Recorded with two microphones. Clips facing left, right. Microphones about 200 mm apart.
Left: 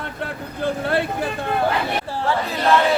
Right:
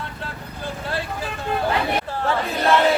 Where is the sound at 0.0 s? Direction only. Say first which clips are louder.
Left 4 dB; 60° left (ahead or behind).